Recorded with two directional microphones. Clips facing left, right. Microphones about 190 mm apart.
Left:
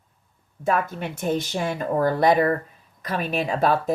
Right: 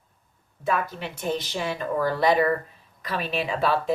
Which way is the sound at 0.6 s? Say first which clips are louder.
Left 3 dB; 50° left (ahead or behind).